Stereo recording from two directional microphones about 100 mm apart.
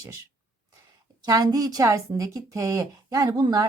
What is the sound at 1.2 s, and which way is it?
A woman's voice, 40° right (ahead or behind).